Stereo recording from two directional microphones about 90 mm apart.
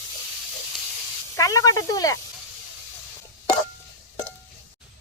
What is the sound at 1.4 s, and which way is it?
Speech, 40° left (ahead or behind).